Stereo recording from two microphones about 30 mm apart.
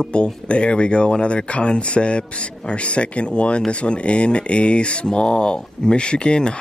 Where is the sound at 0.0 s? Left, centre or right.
Left.